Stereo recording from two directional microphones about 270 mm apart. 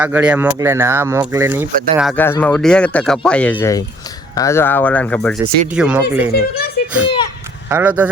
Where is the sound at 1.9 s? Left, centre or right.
Centre.